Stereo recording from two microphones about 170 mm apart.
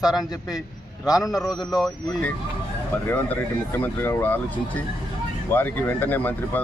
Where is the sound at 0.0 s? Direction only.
5° right (ahead or behind).